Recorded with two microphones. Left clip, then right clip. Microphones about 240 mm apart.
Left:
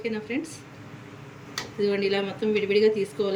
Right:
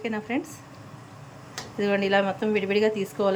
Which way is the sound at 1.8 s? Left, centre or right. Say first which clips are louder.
Right 2 dB; centre.